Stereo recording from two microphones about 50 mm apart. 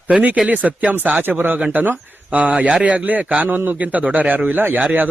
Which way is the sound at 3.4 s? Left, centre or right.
Right.